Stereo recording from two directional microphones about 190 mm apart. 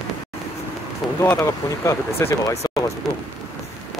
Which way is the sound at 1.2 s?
15° left (ahead or behind).